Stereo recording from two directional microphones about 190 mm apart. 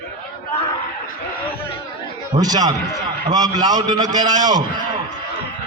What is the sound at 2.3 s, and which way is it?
A man's voice, 20° right (ahead or behind).